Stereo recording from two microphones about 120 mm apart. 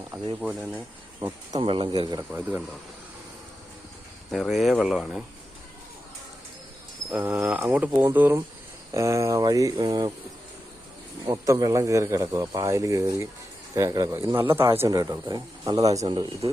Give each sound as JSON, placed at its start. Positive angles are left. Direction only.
{"t": 0.4, "sound": "speech", "side_deg": -10}
{"t": 1.6, "sound": "speech", "side_deg": -40}
{"t": 2.3, "sound": "speech", "side_deg": -15}
{"t": 4.3, "sound": "speech", "side_deg": 0}
{"t": 7.1, "sound": "speech", "side_deg": -15}
{"t": 11.4, "sound": "speech", "side_deg": -30}